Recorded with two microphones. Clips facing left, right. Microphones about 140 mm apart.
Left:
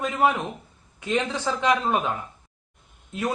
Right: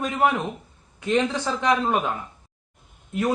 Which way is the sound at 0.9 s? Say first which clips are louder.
Right 3 dB; 15° left (ahead or behind).